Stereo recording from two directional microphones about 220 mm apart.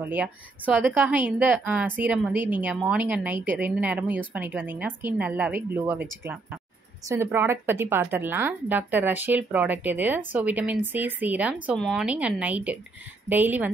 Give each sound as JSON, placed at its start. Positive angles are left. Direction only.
{"t": 0.0, "sound": "a woman's voice", "side_deg": -10}